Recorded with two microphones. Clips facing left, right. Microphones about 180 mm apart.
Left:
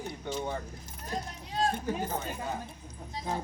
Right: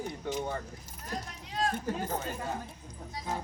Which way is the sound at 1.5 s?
30° left (ahead or behind).